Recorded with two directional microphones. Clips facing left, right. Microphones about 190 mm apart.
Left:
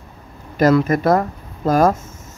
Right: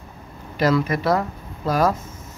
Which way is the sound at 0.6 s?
45° left (ahead or behind).